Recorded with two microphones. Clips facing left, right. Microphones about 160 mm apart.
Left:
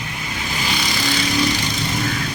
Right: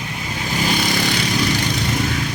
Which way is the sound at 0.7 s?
50° right (ahead or behind).